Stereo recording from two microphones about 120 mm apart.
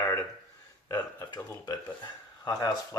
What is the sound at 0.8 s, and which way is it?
Speech, 30° left (ahead or behind).